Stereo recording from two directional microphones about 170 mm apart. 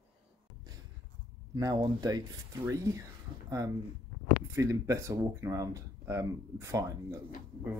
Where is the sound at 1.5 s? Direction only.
25° right (ahead or behind).